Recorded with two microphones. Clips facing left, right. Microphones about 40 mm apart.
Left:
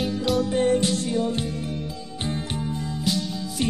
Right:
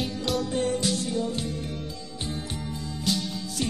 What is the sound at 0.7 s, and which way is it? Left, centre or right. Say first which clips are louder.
Music: left 5 dB; left.